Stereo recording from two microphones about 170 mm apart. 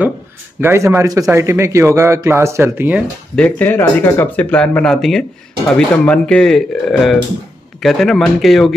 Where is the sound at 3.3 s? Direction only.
10° left (ahead or behind).